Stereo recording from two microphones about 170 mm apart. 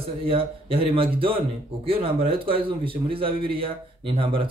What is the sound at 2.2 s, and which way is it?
Speech, 35° right (ahead or behind).